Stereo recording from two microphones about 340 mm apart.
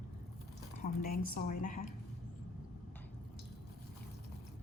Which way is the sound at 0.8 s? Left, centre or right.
Left.